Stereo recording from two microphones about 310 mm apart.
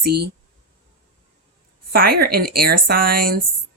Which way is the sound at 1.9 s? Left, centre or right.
Right.